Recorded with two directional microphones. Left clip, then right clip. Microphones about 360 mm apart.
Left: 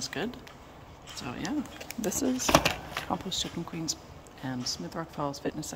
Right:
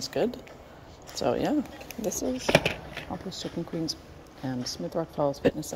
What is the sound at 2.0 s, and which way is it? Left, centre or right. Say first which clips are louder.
Speech: right 1 dB; centre.